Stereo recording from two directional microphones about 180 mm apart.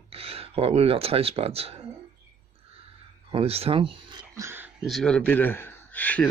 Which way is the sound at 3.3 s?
35° right (ahead or behind).